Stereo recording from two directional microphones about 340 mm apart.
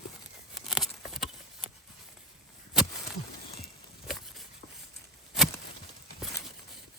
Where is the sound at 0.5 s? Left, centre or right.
Centre.